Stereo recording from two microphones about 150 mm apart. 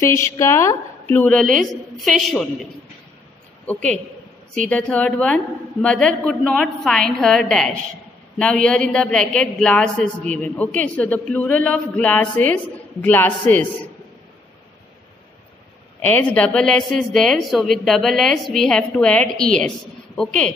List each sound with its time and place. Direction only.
0.0 s a woman's voice: 20° left (ahead or behind); by 2.4 s centre (ahead or behind)
3.6 s a woman's voice: 5° left (ahead or behind)
16.0 s a woman's voice: 10° left (ahead or behind)